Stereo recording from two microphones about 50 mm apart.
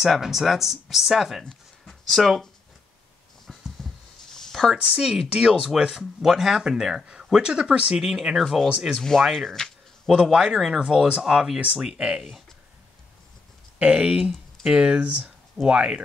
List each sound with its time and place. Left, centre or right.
0.0 s speech: centre
3.8 s a sound: centre
4.8 s speech: centre
8.4 s speech: centre
9.2 s a sound: centre
10.1 s speech: centre
10.9 s speech: centre
13.7 s speech: right